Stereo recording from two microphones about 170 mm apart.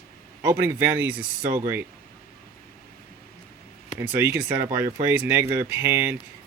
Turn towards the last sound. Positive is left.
turn(degrees=-15)  # may be behind; listen again after turning